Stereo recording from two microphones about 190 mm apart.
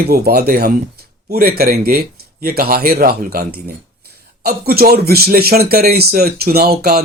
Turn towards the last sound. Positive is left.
turn(degrees=-55)  # may be behind; listen again after turning